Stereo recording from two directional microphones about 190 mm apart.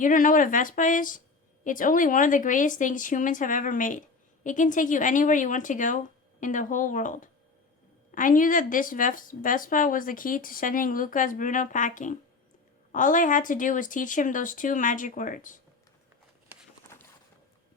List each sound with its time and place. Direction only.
0.0 s speech: 45° left (ahead or behind)